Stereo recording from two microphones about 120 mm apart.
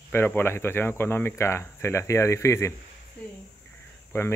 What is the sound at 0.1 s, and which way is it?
Speech, 20° left (ahead or behind).